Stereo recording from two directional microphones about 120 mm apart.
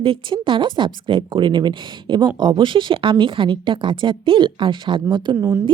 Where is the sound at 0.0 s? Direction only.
45° right (ahead or behind).